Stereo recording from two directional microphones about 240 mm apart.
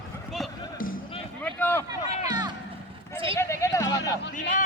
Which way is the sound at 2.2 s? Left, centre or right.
Left.